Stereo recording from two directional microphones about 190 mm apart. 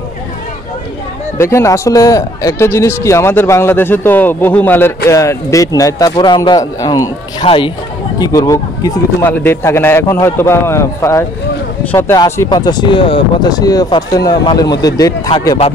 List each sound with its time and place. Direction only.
1.4 s a man's voice: 15° left (ahead or behind)